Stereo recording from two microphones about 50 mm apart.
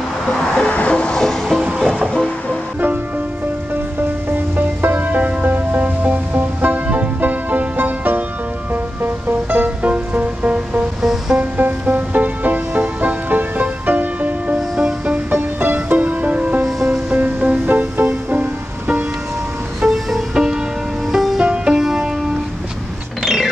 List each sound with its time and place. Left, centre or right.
0.3 s music: centre
1.2 s music: centre
4.6 s music: right
9.8 s music: right
11.0 s music: centre
11.3 s music: right
14.8 s music: centre
15.6 s music: right
16.6 s music: centre
17.1 s music: right
17.6 s music: right
19.8 s music: centre
21.4 s music: centre
23.2 s mechanisms: centre